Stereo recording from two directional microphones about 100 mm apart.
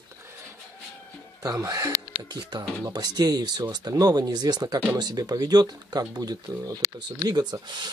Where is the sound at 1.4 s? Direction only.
40° right (ahead or behind).